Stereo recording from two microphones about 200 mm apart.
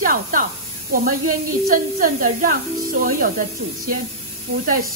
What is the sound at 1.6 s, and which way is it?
Speech, 45° right (ahead or behind).